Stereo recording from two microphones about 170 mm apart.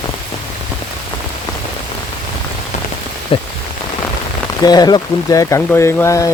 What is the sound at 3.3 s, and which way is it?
Speech, 30° left (ahead or behind).